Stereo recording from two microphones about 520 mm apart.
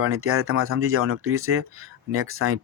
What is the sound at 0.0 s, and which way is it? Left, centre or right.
Speech, right.